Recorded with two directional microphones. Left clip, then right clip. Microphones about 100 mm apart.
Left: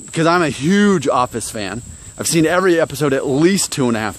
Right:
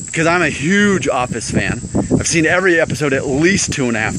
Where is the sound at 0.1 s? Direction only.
30° left (ahead or behind).